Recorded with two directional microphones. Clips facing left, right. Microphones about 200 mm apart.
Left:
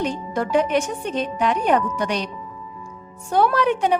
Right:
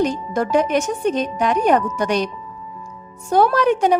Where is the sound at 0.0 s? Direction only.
40° right (ahead or behind).